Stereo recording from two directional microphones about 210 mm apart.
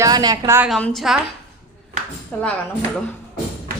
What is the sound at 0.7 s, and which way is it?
Speech, centre (ahead or behind).